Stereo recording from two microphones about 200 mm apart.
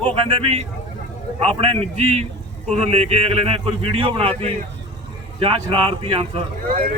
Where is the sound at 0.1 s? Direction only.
30° right (ahead or behind).